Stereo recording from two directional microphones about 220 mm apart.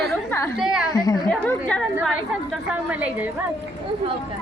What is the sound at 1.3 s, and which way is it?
A woman's voice, 5° left (ahead or behind).